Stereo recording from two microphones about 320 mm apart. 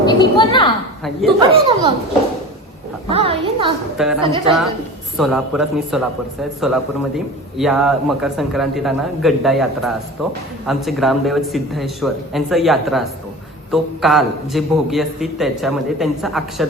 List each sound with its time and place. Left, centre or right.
0.0 s a woman's voice: centre
1.4 s speech: centre
3.1 s a child's voice: centre
3.9 s a man's voice: centre
4.2 s speech: centre
5.1 s a man's voice: centre
7.6 s a man's voice: centre